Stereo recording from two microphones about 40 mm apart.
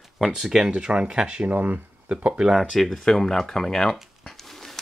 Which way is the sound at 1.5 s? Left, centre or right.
Right.